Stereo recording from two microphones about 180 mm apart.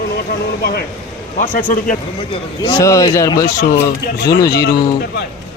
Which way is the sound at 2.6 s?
15° left (ahead or behind).